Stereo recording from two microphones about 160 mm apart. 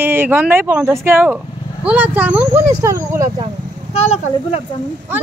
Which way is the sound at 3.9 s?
40° left (ahead or behind).